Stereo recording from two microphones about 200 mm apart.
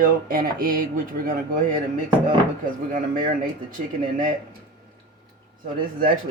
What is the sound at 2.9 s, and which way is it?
Speech, 45° right (ahead or behind).